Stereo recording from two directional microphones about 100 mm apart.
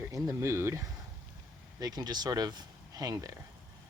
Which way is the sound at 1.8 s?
40° right (ahead or behind).